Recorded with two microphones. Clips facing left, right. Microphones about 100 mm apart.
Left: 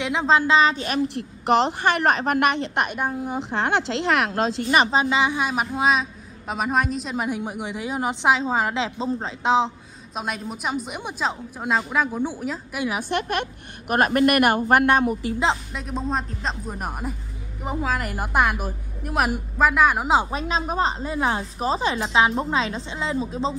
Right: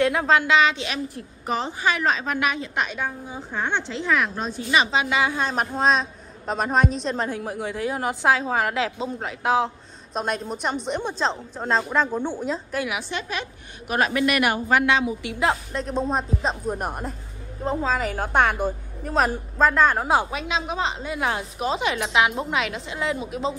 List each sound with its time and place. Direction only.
0.0 s a woman's voice: 20° left (ahead or behind); by 1.0 s 45° left (ahead or behind)
1.0 s a woman's voice: 75° left (ahead or behind); by 3.0 s 60° left (ahead or behind)
3.3 s a woman's voice: 75° left (ahead or behind)
4.6 s a woman's voice: 40° left (ahead or behind)
5.1 s a woman's voice: 20° left (ahead or behind)
10.1 s a woman's voice: 5° left (ahead or behind)
13.1 s a woman's voice: 55° left (ahead or behind)
15.5 s a woman's voice: 5° left (ahead or behind)
20.2 s a woman's voice: 35° left (ahead or behind)